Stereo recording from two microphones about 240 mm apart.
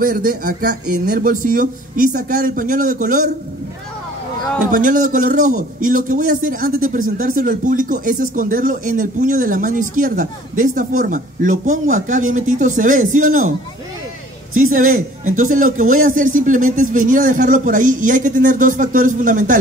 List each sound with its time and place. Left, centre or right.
0.0 s speech: right
4.7 s speech: right
14.7 s speech: right